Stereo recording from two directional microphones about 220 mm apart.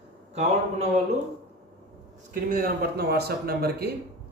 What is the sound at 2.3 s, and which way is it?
A man's voice, 40° right (ahead or behind).